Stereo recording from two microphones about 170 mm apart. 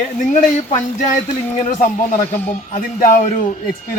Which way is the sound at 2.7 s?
55° left (ahead or behind).